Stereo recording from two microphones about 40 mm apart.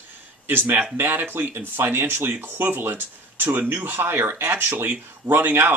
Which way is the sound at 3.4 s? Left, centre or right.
Right.